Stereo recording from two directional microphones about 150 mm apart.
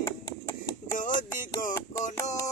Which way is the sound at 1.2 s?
60° left (ahead or behind).